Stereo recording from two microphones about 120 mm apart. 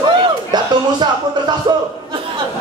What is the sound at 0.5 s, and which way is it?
Speech, 35° right (ahead or behind).